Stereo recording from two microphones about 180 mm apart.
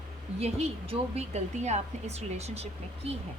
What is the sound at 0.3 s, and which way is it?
A woman's voice, 35° right (ahead or behind).